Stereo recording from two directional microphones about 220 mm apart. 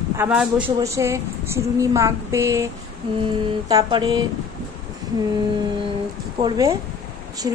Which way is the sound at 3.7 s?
20° right (ahead or behind).